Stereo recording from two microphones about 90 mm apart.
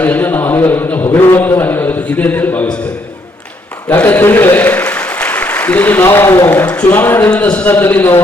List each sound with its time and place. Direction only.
0.0 s a sound: 20° left (ahead or behind)
1.4 s a man's voice: 20° left (ahead or behind)
3.8 s a man's voice: 20° left (ahead or behind)